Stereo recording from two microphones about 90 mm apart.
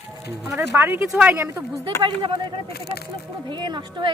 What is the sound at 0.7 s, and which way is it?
Speech, 25° right (ahead or behind).